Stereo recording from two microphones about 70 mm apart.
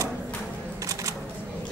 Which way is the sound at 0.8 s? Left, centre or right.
Right.